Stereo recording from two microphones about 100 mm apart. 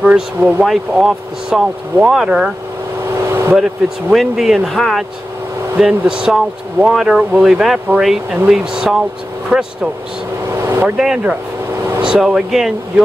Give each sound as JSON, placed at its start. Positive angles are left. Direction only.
{"t": 0.0, "sound": "speech", "side_deg": -15}
{"t": 3.3, "sound": "vehicle", "side_deg": -25}
{"t": 4.1, "sound": "speech", "side_deg": -5}
{"t": 10.5, "sound": "vehicle", "side_deg": -25}
{"t": 11.0, "sound": "speech", "side_deg": -5}